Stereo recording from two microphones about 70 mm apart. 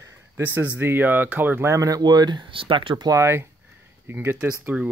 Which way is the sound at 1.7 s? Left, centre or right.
Right.